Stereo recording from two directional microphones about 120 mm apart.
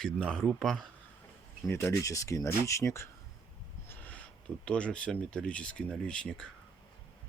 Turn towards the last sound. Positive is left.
turn(degrees=5)  # may be behind; listen again after turning